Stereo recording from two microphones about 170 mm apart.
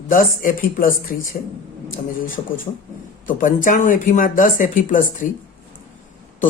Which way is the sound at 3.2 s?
50° left (ahead or behind).